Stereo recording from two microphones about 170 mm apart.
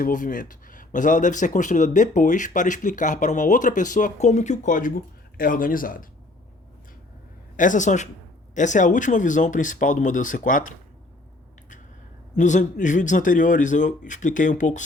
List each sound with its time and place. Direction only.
0.0 s speech: 50° left (ahead or behind)
7.5 s speech: 50° left (ahead or behind)
12.4 s speech: 45° left (ahead or behind)